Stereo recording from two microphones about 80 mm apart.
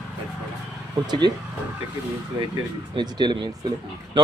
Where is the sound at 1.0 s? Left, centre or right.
Right.